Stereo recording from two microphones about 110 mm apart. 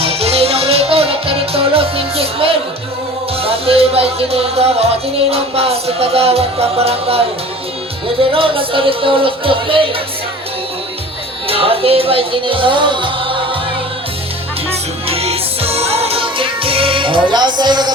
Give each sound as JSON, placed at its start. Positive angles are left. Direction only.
{"t": 0.0, "sound": "music", "side_deg": -65}
{"t": 8.2, "sound": "music", "side_deg": -55}
{"t": 11.4, "sound": "music", "side_deg": -60}
{"t": 14.7, "sound": "music", "side_deg": -65}